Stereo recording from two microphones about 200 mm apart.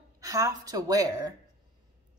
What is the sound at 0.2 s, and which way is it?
A woman's voice, 15° right (ahead or behind).